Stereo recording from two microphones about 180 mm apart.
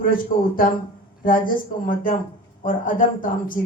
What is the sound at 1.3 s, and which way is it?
Speech, 50° left (ahead or behind).